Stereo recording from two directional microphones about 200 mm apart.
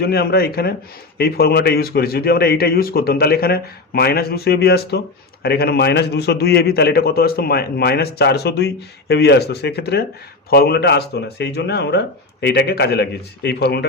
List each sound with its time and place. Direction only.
0.0 s speech: 55° left (ahead or behind)